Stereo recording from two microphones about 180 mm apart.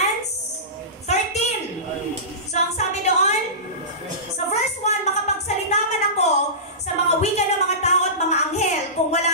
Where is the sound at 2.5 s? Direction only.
40° left (ahead or behind).